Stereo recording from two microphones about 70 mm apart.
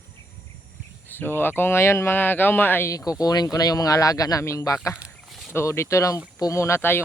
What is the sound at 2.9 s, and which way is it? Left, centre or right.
Speech, left.